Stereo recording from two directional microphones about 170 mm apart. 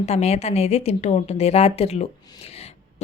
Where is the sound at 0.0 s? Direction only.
40° left (ahead or behind).